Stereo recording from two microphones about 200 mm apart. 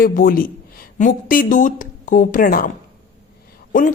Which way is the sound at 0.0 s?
45° left (ahead or behind).